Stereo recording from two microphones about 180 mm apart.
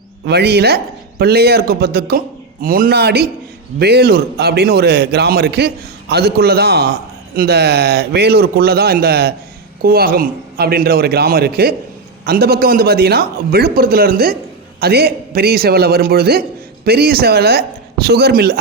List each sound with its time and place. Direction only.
0.3 s a man's voice: 65° right (ahead or behind)